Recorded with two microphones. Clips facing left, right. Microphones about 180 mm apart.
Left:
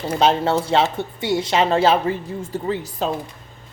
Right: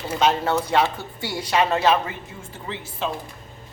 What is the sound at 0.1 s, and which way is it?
Speech, 30° left (ahead or behind).